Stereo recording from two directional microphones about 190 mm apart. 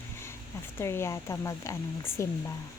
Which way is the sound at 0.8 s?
15° left (ahead or behind).